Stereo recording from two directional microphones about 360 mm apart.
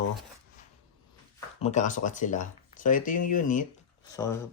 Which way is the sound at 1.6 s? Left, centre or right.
Centre.